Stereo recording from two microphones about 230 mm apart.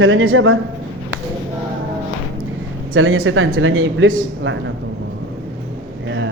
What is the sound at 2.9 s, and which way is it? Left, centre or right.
Speech, right.